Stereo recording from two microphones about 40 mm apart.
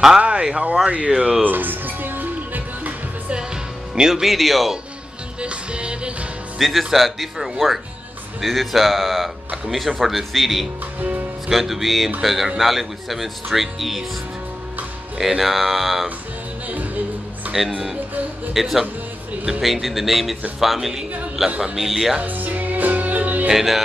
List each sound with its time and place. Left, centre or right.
0.2 s speech: right
1.4 s music: right
3.9 s speech: centre
5.4 s music: right
6.6 s speech: centre
11.0 s speech: right
11.4 s speech: centre
15.1 s speech: centre
16.6 s music: right
17.5 s speech: centre
22.2 s music: right
23.5 s speech: centre